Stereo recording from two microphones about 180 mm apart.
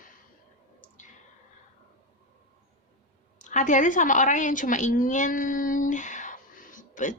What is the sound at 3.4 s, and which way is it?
A woman's voice, 45° left (ahead or behind).